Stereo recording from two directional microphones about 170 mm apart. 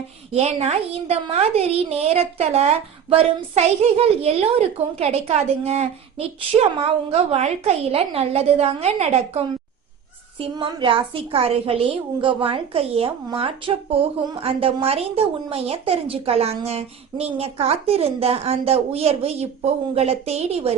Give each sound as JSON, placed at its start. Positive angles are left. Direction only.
{"t": 0.3, "sound": "a woman's voice", "side_deg": -40}
{"t": 10.4, "sound": "a woman's voice", "side_deg": -30}